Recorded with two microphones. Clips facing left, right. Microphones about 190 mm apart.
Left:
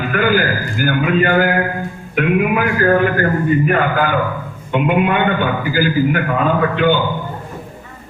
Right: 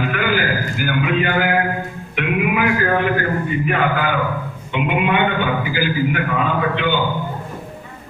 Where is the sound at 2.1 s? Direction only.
45° left (ahead or behind).